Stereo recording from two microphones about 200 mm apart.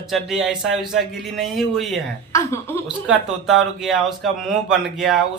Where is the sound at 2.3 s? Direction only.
15° left (ahead or behind).